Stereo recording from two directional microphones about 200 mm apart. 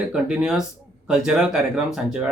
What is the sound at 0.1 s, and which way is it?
Speech, 5° right (ahead or behind).